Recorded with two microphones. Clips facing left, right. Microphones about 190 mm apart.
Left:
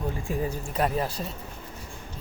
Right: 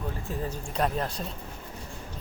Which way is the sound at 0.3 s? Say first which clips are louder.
Left 4 dB; 10° left (ahead or behind).